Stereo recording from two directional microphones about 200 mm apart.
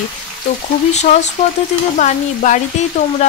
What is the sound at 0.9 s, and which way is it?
A woman's voice, 35° left (ahead or behind).